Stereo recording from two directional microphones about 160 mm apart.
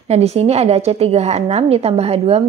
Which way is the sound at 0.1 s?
40° right (ahead or behind).